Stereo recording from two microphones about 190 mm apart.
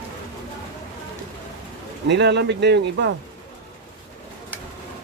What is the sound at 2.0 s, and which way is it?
Speech, 65° right (ahead or behind).